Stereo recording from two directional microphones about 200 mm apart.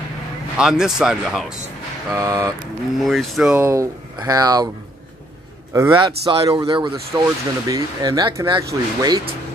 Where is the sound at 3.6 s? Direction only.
15° right (ahead or behind).